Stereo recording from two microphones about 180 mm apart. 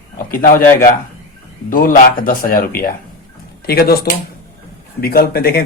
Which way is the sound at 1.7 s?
50° left (ahead or behind).